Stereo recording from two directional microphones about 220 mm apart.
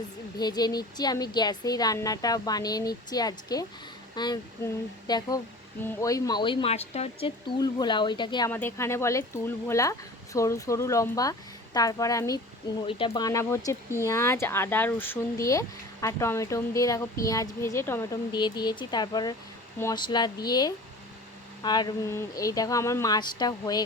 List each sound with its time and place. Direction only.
0.3 s speech: 20° left (ahead or behind)